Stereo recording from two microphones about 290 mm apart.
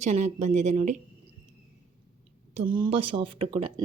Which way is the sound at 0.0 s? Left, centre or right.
Right.